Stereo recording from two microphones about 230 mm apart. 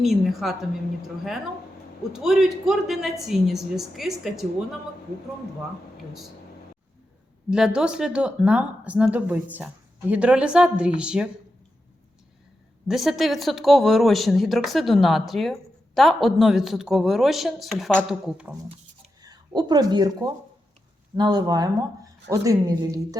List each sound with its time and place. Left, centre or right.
0.0 s speech: centre
7.5 s speech: centre
12.9 s speech: centre
19.2 s speech: centre